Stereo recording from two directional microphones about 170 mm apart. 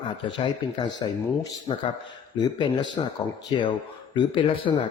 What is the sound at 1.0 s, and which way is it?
Speech, 25° left (ahead or behind).